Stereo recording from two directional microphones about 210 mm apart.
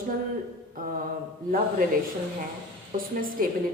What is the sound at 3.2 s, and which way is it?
Speech, 40° right (ahead or behind).